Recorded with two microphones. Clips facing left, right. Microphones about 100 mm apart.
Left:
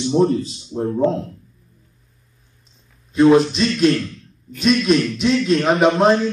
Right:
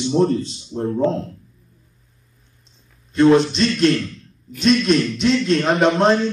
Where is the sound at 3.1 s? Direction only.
5° left (ahead or behind).